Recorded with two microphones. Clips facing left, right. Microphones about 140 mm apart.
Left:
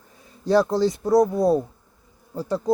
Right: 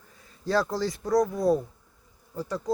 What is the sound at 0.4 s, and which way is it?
Speech, 20° left (ahead or behind).